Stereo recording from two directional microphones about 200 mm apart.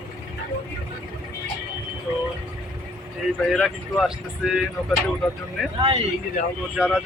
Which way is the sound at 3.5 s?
Centre (ahead or behind).